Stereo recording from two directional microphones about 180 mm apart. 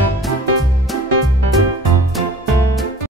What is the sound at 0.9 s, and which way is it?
Music, centre (ahead or behind).